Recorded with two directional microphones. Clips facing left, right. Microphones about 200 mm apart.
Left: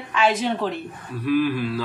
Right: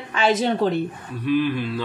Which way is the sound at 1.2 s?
5° left (ahead or behind).